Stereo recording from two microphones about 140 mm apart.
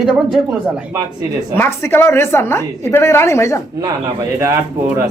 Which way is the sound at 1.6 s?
15° left (ahead or behind).